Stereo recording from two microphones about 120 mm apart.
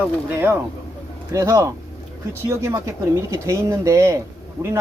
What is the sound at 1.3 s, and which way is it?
Speech, 25° right (ahead or behind).